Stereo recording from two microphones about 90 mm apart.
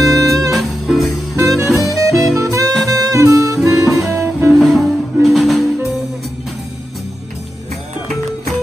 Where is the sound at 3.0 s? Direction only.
40° right (ahead or behind).